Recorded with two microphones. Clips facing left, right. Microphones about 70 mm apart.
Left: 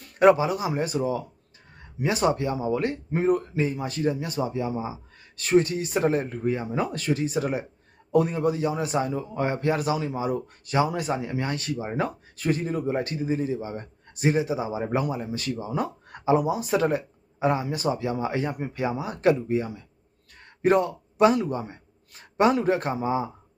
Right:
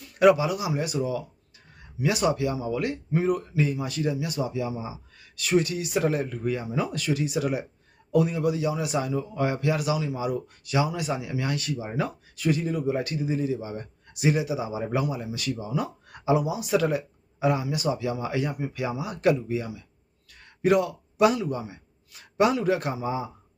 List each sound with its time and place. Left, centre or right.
0.0 s a man's voice: left